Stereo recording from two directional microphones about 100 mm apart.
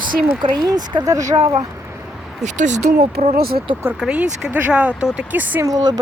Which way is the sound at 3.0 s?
90° right.